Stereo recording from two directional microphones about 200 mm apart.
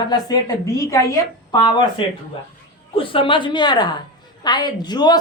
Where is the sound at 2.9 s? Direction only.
25° left (ahead or behind).